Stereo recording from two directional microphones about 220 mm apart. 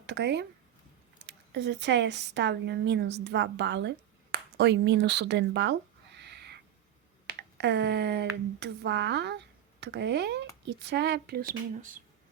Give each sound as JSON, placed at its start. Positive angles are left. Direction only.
{"t": 0.0, "sound": "speech", "side_deg": -50}
{"t": 6.1, "sound": "owl", "side_deg": -50}
{"t": 7.3, "sound": "speech", "side_deg": -50}